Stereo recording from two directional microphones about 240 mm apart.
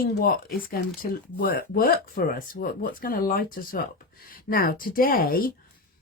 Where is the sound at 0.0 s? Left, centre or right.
Left.